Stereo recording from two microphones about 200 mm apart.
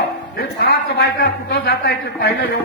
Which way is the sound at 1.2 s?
50° left (ahead or behind).